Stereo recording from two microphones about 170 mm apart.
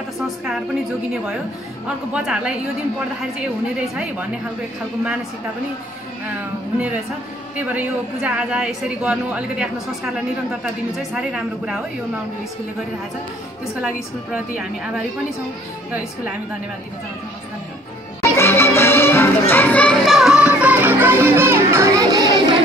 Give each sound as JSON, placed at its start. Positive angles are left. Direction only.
{"t": 2.1, "sound": "a woman's voice", "side_deg": -5}
{"t": 3.9, "sound": "a woman's voice", "side_deg": -5}
{"t": 7.5, "sound": "a woman's voice", "side_deg": -10}
{"t": 14.3, "sound": "a woman's voice", "side_deg": -5}
{"t": 18.2, "sound": "music", "side_deg": 15}